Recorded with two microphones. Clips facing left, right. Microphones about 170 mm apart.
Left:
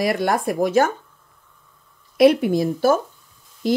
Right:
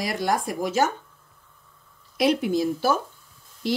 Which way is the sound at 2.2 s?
60° left (ahead or behind).